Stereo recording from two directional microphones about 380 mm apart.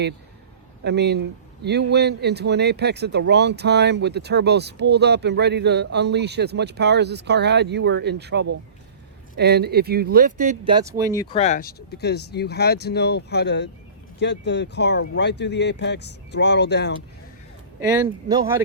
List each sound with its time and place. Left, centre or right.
0.9 s speech: right; by 11.1 s centre
11.1 s speech: centre; by 16.9 s left
17.7 s speech: centre